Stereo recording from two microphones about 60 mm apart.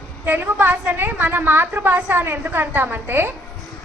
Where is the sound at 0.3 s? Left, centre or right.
Right.